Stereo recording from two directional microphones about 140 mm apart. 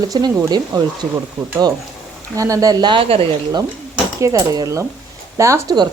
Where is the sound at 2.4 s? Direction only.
25° right (ahead or behind); by 3.2 s 40° right (ahead or behind).